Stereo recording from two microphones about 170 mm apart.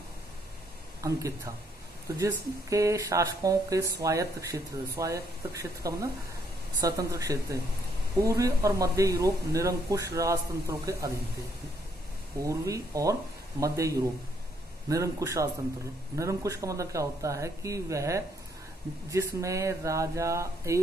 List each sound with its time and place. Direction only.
1.0 s speech: 20° right (ahead or behind)
12.4 s speech: 20° right (ahead or behind)